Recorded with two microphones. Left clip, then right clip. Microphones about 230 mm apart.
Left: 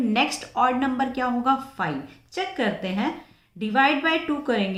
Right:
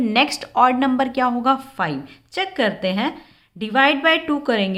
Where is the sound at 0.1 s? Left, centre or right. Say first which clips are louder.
Right 5 dB; right.